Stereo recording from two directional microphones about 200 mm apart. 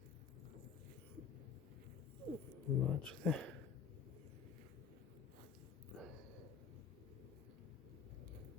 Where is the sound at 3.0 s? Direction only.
5° left (ahead or behind).